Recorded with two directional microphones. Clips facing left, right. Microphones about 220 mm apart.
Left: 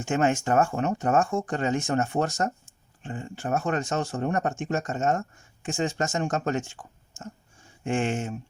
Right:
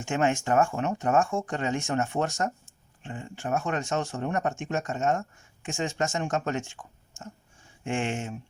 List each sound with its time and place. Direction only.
0.0 s speech: 40° left (ahead or behind)
7.9 s speech: 40° left (ahead or behind)